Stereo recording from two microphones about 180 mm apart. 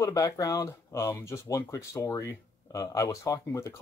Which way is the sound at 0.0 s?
20° left (ahead or behind).